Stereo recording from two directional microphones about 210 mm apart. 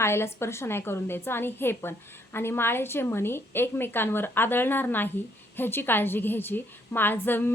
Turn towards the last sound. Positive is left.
turn(degrees=10)  # may be behind; listen again after turning